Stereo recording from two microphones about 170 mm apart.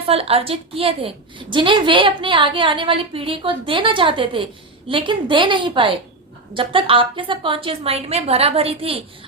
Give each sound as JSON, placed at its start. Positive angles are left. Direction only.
{"t": 0.1, "sound": "a woman's voice", "side_deg": -35}